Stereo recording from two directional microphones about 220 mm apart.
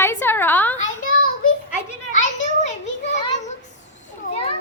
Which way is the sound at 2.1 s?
35° left (ahead or behind).